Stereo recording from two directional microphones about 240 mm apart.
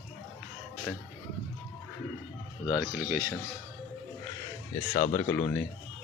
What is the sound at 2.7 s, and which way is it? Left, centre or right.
Speech, centre.